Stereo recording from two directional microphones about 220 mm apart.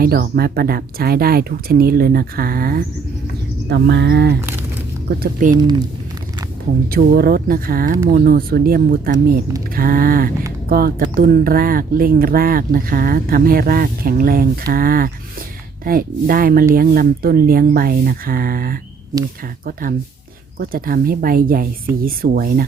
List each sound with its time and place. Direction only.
0.0 s speech: 45° right (ahead or behind)
6.8 s speech: 45° right (ahead or behind)